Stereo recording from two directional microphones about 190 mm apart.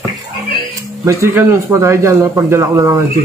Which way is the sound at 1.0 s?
15° right (ahead or behind).